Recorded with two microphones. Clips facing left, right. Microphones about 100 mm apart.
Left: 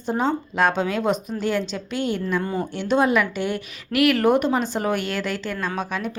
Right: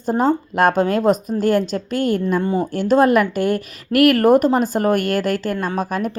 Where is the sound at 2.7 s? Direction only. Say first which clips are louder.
Right 5 dB; 45° right (ahead or behind).